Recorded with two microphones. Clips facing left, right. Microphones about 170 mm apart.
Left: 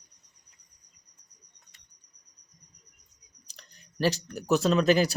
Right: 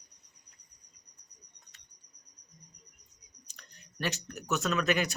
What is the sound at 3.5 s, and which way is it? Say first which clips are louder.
Speech: left 3 dB; 30° left (ahead or behind).